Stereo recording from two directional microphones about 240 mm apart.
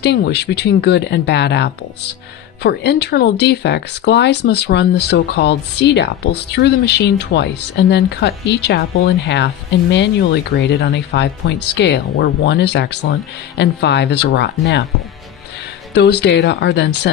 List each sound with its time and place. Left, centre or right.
0.0 s speech: left
15.9 s speech: left